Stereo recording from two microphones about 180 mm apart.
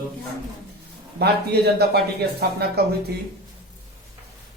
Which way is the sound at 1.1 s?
65° right (ahead or behind).